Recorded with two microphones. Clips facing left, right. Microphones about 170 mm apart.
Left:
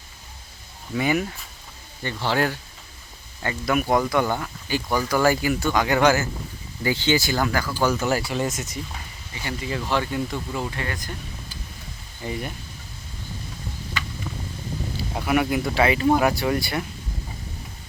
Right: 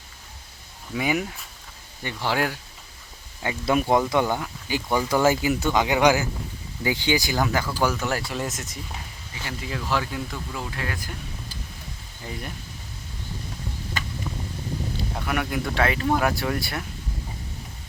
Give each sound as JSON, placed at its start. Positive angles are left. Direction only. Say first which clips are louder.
{"t": 0.9, "sound": "speech", "louder": "left 2 dB", "side_deg": -10}
{"t": 3.7, "sound": "speech", "louder": "even", "side_deg": -25}
{"t": 7.8, "sound": "speech", "louder": "left 5 dB", "side_deg": 0}
{"t": 12.2, "sound": "speech", "louder": "left 5 dB", "side_deg": 0}
{"t": 14.0, "sound": "a sound", "louder": "left 1 dB", "side_deg": -45}
{"t": 14.9, "sound": "speech", "louder": "left 7 dB", "side_deg": 5}